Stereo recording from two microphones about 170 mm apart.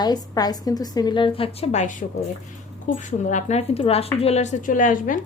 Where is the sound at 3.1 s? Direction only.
45° left (ahead or behind).